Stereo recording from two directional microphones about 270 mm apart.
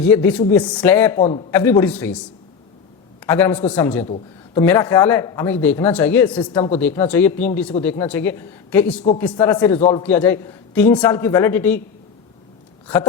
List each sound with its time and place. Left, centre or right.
0.0 s a man's voice: centre
1.2 s a man's voice: centre
1.5 s a man's voice: centre
3.2 s a man's voice: centre
4.0 s speech: left
4.6 s a man's voice: centre
6.4 s a man's voice: centre